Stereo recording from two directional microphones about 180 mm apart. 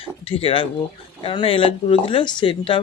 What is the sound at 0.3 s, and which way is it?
Speech, 30° left (ahead or behind).